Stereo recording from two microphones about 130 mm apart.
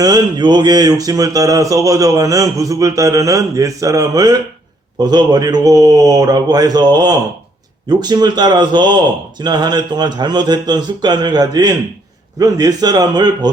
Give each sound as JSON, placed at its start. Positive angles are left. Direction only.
{"t": 0.0, "sound": "a man's voice", "side_deg": -30}